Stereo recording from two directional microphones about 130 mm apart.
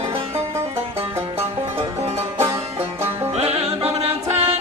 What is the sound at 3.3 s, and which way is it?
Music, 50° right (ahead or behind).